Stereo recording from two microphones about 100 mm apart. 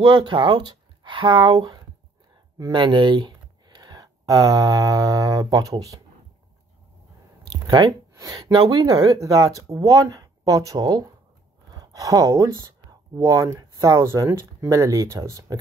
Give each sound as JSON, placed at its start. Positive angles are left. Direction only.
{"t": 0.0, "sound": "speech", "side_deg": -50}
{"t": 7.6, "sound": "speech", "side_deg": -50}
{"t": 8.1, "sound": "speech", "side_deg": -35}